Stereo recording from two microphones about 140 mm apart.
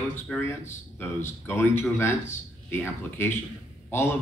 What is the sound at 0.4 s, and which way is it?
Speech, 20° left (ahead or behind).